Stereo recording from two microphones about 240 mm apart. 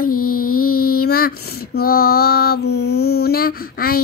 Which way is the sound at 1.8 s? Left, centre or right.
Left.